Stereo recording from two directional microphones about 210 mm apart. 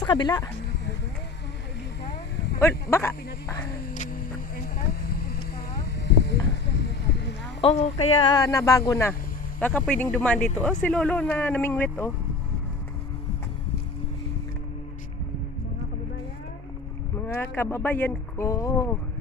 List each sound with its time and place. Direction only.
0.0 s speech: 20° left (ahead or behind)
2.9 s speech: 15° left (ahead or behind)
3.8 s a sound: 40° left (ahead or behind)
4.9 s vehicle: 45° left (ahead or behind)
6.1 s a sound: 55° left (ahead or behind)
7.6 s speech: 30° left (ahead or behind); by 12.1 s 10° left (ahead or behind)
17.2 s speech: 10° left (ahead or behind)